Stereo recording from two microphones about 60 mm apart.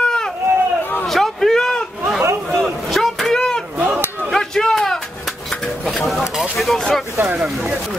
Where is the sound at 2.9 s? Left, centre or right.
Centre.